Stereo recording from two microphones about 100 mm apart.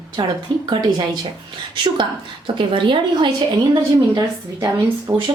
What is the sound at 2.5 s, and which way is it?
Speech, 55° right (ahead or behind).